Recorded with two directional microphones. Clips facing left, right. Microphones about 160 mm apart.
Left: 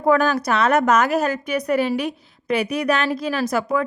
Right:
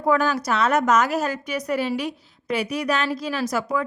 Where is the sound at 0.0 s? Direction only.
55° left (ahead or behind).